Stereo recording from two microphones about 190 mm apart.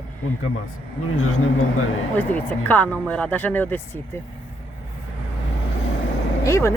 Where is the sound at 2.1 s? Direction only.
10° left (ahead or behind).